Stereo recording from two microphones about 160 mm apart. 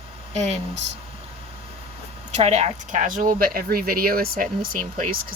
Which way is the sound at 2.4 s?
45° right (ahead or behind).